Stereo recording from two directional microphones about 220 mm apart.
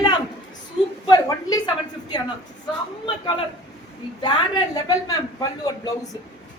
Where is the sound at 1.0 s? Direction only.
20° left (ahead or behind).